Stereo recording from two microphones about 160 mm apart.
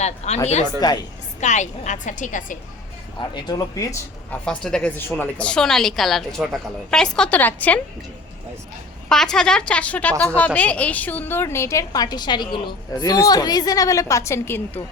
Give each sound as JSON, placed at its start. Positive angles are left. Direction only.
{"t": 0.3, "sound": "a woman's voice", "side_deg": 45}
{"t": 0.8, "sound": "speech", "side_deg": 25}
{"t": 1.4, "sound": "a woman's voice", "side_deg": 50}
{"t": 3.2, "sound": "speech", "side_deg": 25}
{"t": 4.3, "sound": "a woman's voice", "side_deg": 5}
{"t": 9.0, "sound": "a woman's voice", "side_deg": 5}